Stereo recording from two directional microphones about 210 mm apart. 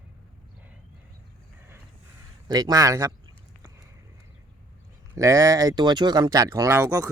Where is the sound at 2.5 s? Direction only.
20° right (ahead or behind).